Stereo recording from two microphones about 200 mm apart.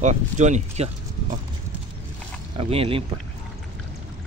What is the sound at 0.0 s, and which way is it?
Speech, 35° right (ahead or behind).